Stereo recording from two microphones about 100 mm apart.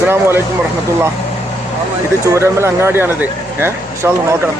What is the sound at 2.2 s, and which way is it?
Speech, 30° right (ahead or behind).